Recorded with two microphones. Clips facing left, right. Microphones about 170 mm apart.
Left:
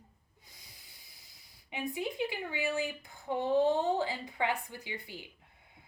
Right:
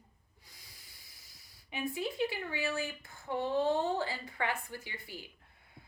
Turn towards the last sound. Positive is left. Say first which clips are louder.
# left 3 dB
turn(degrees=15)  # may be behind; listen again after turning